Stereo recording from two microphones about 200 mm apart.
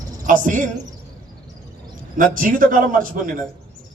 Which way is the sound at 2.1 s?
45° right (ahead or behind).